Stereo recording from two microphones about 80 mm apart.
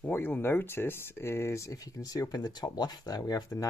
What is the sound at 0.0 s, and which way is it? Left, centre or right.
Speech, left.